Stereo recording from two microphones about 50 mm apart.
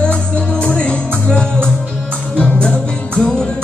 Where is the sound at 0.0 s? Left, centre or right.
Left.